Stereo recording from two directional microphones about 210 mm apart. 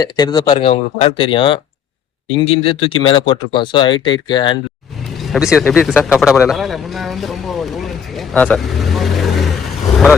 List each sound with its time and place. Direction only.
0.0 s speech: 20° left (ahead or behind)
5.3 s speech: 5° right (ahead or behind)